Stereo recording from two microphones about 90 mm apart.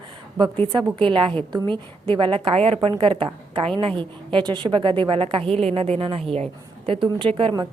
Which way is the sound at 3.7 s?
65° right (ahead or behind).